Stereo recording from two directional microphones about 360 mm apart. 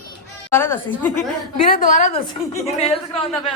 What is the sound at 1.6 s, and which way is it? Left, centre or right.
A woman's voice, left.